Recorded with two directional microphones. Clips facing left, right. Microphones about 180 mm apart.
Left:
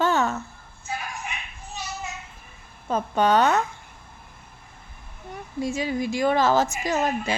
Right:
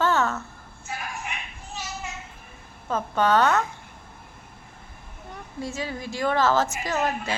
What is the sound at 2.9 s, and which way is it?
Speech, 15° left (ahead or behind).